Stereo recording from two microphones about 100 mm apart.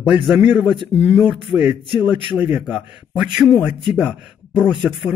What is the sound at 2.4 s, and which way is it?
A man's voice, 10° right (ahead or behind).